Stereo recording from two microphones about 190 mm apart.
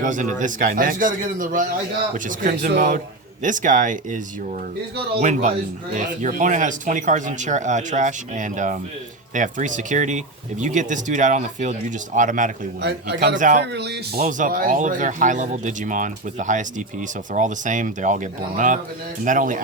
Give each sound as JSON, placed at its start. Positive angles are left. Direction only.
{"t": 0.0, "sound": "a man's voice", "side_deg": -40}
{"t": 5.2, "sound": "speech", "side_deg": -40}
{"t": 12.8, "sound": "speech", "side_deg": -60}
{"t": 13.4, "sound": "a man's voice", "side_deg": -45}
{"t": 13.7, "sound": "speech", "side_deg": -60}
{"t": 14.3, "sound": "a man's voice", "side_deg": -45}